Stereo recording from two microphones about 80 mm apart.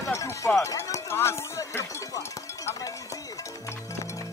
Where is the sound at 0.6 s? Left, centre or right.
Left.